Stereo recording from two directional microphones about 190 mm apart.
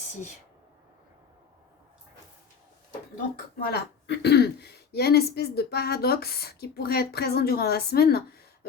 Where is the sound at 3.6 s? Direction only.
55° left (ahead or behind).